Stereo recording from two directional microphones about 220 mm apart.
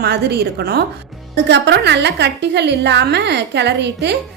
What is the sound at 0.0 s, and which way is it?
A woman's voice, 50° right (ahead or behind).